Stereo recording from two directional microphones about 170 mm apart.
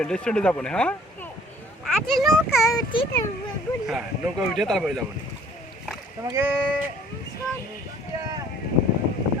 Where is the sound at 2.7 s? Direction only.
30° left (ahead or behind).